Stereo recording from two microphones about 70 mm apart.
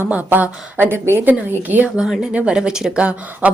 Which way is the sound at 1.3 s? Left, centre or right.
Right.